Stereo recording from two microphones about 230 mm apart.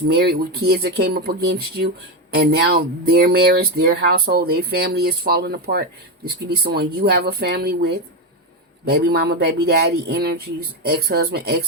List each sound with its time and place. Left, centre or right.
0.1 s speech: right